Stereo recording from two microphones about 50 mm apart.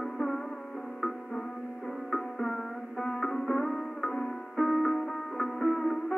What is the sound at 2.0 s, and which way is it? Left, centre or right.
Music, centre.